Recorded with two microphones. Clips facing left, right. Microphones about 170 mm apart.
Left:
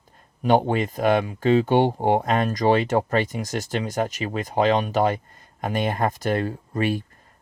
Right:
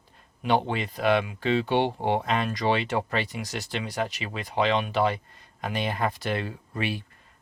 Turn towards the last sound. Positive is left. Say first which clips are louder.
# left 7 dB
turn(degrees=45)  # may be behind; listen again after turning